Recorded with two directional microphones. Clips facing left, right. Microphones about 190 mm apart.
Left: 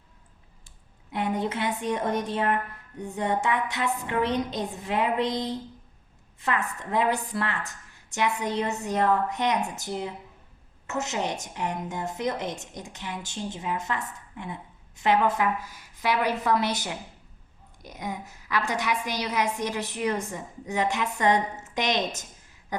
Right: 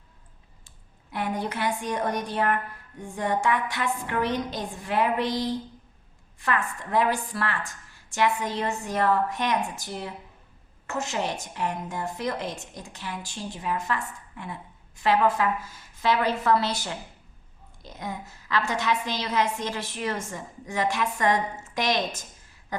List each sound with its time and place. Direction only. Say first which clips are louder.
1.1 s a woman's voice: left 2 dB; 20° left (ahead or behind)
22.7 s quack: left 1 dB; 15° left (ahead or behind)